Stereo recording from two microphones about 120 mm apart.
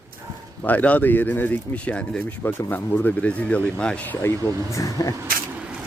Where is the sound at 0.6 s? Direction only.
15° left (ahead or behind).